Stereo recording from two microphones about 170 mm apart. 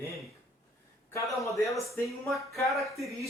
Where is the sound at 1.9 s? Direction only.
Centre (ahead or behind).